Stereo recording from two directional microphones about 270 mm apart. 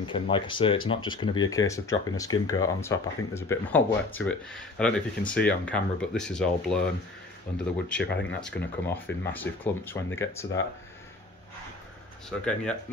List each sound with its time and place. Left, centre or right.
0.0 s speech: centre
12.3 s speech: centre